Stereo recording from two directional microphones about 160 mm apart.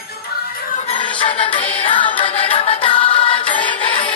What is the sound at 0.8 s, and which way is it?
Music, 35° left (ahead or behind).